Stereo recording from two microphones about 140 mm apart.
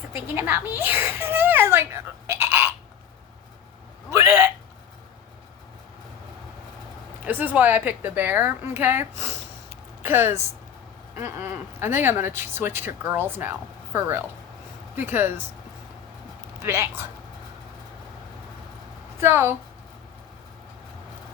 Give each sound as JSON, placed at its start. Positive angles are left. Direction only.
{"t": 0.3, "sound": "a sound", "side_deg": -15}
{"t": 4.1, "sound": "hiccup", "side_deg": -15}
{"t": 7.3, "sound": "a woman's voice", "side_deg": -15}
{"t": 16.6, "sound": "a woman's voice", "side_deg": -15}
{"t": 19.2, "sound": "a woman's voice", "side_deg": -15}